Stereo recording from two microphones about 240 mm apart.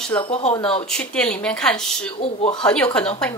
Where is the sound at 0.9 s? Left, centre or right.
Centre.